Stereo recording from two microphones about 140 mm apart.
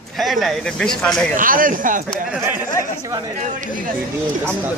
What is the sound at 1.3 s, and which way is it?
Speech, 80° right.